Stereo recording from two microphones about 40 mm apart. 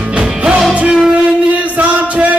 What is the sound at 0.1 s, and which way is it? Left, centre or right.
Music, right.